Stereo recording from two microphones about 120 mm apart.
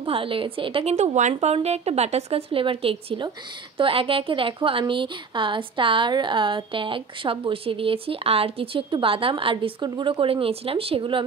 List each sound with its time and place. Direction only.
0.0 s a woman's voice: 50° right (ahead or behind)
0.9 s speech: 80° right
1.3 s a woman's voice: 60° right (ahead or behind); by 11.2 s 45° right (ahead or behind)